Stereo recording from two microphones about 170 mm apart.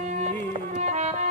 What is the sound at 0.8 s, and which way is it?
Music, 45° right (ahead or behind).